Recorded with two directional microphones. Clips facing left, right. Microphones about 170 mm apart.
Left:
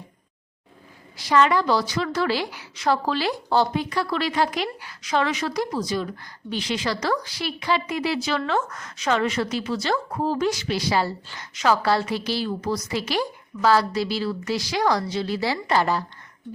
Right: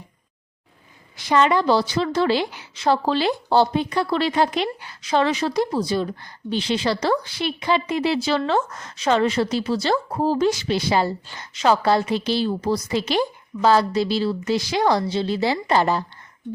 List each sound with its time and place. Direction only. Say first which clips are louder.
1.1 s a woman's voice: right 1 dB; 20° right (ahead or behind)